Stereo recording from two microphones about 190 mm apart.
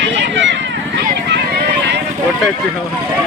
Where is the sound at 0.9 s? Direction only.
65° right (ahead or behind).